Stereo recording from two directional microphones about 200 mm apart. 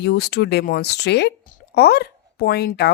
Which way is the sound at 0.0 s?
50° left (ahead or behind).